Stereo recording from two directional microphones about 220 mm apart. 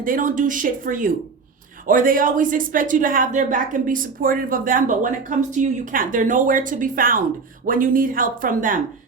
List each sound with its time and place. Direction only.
0.0 s speech: 40° right (ahead or behind)